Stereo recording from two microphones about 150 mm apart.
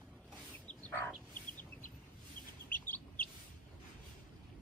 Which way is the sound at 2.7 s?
10° left (ahead or behind).